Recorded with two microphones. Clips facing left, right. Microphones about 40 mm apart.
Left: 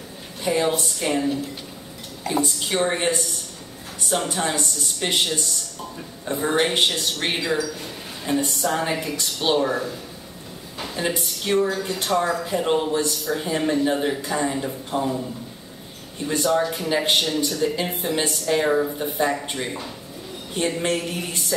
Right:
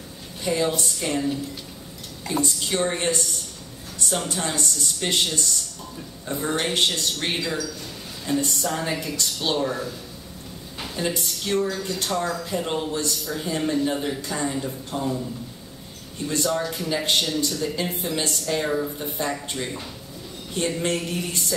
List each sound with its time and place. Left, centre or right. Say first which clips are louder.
0.4 s speech: left 2 dB; centre
11.0 s speech: left 1 dB; centre
16.3 s speech: left 4 dB; centre